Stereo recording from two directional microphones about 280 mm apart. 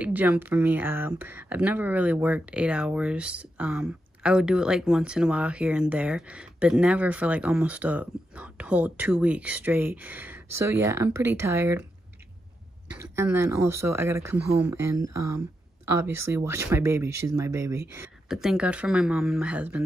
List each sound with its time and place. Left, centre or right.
0.0 s speech: centre
13.0 s speech: centre
15.2 s a sound: right
16.3 s speech: centre